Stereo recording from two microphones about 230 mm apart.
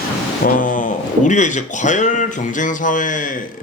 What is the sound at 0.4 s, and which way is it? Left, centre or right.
A man's voice, left.